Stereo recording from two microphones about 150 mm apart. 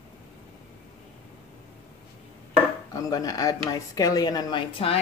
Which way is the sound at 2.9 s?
25° left (ahead or behind).